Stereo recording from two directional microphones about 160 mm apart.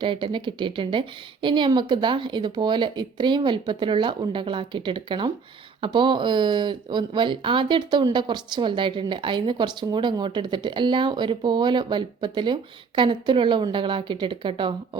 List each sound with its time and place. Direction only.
0.0 s a woman's voice: 30° right (ahead or behind)